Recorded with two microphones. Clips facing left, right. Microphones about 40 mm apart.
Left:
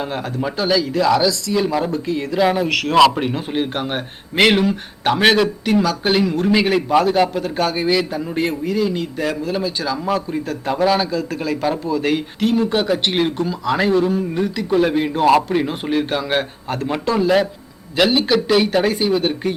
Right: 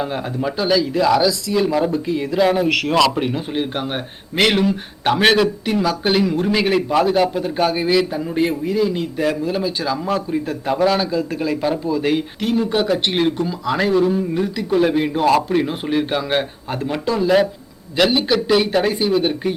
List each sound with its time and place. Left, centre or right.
0.0 s speech: centre
1.9 s speech: centre
2.3 s speech: centre
2.6 s speech: centre
3.2 s speech: centre
5.8 s speech: centre
6.1 s speech: centre
7.4 s speech: centre
11.1 s speech: centre
11.4 s speech: centre